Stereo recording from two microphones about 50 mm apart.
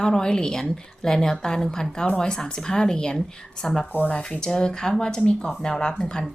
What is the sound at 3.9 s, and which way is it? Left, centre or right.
Speech, left.